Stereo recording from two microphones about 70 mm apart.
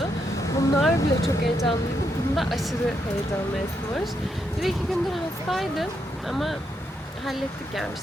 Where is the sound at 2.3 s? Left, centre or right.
Centre.